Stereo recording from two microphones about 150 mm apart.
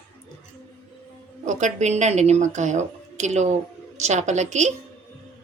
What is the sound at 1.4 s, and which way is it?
Speech, 50° right (ahead or behind).